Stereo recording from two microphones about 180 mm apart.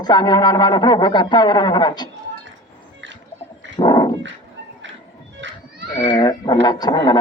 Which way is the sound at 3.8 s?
20° left (ahead or behind).